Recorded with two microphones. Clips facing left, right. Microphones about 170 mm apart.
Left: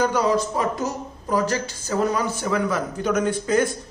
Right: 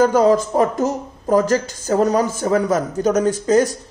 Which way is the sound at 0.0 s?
45° right (ahead or behind).